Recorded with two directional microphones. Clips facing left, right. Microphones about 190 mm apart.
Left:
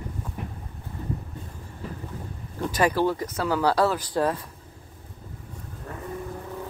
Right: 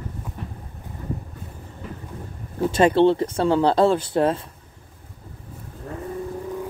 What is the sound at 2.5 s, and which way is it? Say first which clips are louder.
Speech: right 6 dB; 25° right (ahead or behind).